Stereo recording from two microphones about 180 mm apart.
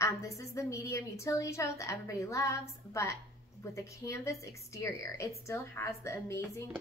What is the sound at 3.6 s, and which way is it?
A woman's voice, 15° left (ahead or behind).